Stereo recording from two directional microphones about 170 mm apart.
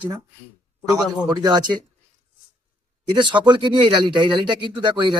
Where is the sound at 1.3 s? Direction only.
25° right (ahead or behind).